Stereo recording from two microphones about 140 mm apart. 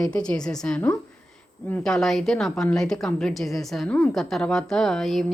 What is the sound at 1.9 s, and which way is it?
A woman's voice, centre (ahead or behind).